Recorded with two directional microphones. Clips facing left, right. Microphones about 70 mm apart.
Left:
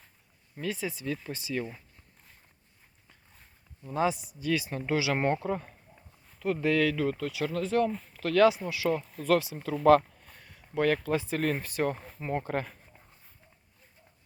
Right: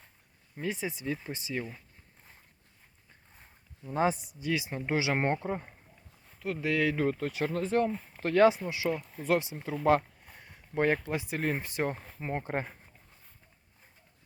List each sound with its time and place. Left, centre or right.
0.5 s speech: right
3.9 s speech: right
4.4 s speech: centre
6.2 s a sound: centre
6.9 s speech: right
7.9 s speech: centre
8.1 s speech: right
9.1 s speech: centre
9.8 s a sound: centre
10.8 s speech: right
11.1 s speech: centre
11.9 s speech: centre
12.5 s speech: right